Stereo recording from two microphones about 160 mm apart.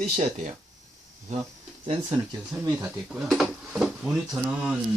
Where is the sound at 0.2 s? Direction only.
50° right (ahead or behind).